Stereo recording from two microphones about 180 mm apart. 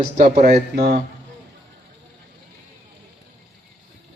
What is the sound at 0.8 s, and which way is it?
Speech, 65° right (ahead or behind).